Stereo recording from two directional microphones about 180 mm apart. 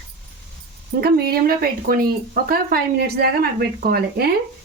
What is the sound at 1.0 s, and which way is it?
Speech, 60° right (ahead or behind).